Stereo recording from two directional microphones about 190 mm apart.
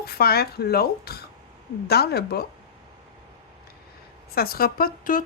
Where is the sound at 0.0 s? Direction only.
55° left (ahead or behind).